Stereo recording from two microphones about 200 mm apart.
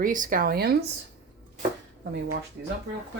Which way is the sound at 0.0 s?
40° right (ahead or behind).